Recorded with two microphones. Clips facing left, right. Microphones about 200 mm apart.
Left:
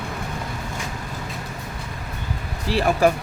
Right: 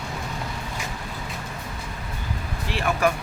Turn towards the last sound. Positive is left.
turn(degrees=35)  # may be behind; listen again after turning